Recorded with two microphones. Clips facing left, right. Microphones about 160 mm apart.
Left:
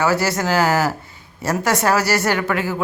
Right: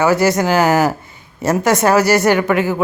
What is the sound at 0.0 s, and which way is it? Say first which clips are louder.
A woman's voice: right 5 dB; 20° right (ahead or behind).